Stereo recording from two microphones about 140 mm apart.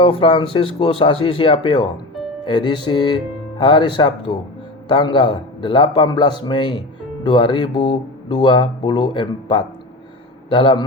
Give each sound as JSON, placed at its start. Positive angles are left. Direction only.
{"t": 0.0, "sound": "speech", "side_deg": 40}